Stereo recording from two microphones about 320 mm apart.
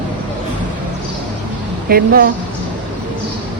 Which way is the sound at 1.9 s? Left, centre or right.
Right.